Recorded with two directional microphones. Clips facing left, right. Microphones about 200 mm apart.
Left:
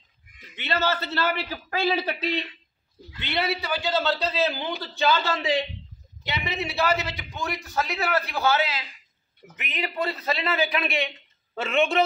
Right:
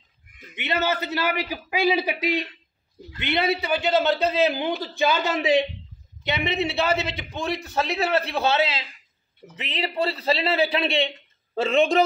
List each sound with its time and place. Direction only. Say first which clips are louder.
0.6 s a man's voice: right 1 dB; 20° right (ahead or behind); by 12.0 s 35° right (ahead or behind)